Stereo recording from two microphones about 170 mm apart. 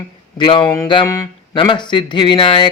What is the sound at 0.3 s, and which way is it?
Speech, 30° left (ahead or behind).